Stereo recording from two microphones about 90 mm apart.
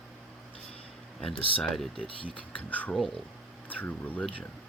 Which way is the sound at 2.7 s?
20° left (ahead or behind).